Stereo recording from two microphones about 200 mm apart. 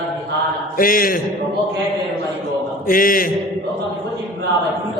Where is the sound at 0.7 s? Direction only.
45° left (ahead or behind).